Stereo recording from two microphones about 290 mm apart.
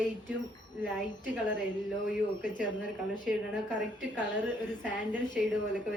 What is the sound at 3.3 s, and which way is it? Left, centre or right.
Speech, centre.